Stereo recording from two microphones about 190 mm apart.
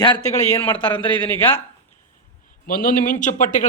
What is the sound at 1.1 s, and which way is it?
Speech, 10° left (ahead or behind).